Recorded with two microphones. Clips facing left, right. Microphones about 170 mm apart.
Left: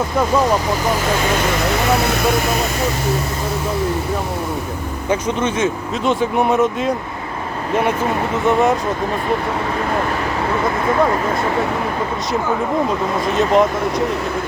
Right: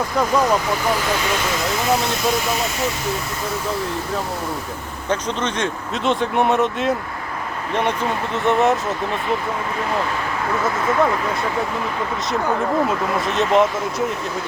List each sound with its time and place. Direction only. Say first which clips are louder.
2.0 s speech: left 4 dB; 65° left (ahead or behind)
5.0 s speech: left 3 dB; 5° left (ahead or behind)
8.4 s speech: left 1 dB; centre (ahead or behind)
13.3 s speech: left 2 dB; centre (ahead or behind)